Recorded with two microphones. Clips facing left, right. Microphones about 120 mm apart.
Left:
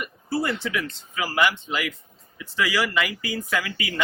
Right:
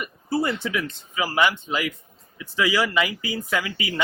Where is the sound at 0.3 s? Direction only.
20° right (ahead or behind).